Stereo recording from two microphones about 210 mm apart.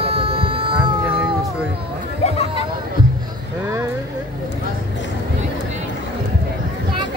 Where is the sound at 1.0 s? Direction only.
5° right (ahead or behind).